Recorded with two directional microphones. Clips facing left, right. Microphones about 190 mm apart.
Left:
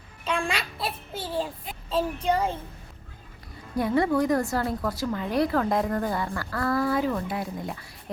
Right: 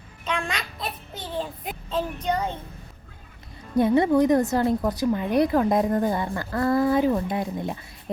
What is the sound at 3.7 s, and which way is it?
A woman's voice, 20° right (ahead or behind).